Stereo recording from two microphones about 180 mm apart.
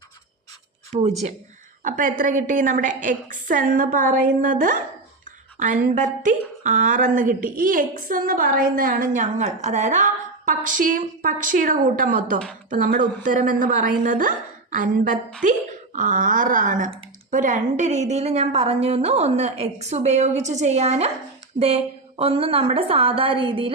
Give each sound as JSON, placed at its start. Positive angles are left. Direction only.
{"t": 1.8, "sound": "a woman's voice", "side_deg": -45}
{"t": 21.5, "sound": "a woman's voice", "side_deg": -25}